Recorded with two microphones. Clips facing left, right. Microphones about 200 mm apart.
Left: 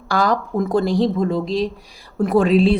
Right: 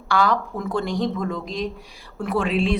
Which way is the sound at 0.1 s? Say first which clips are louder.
Left 2 dB; 40° left (ahead or behind).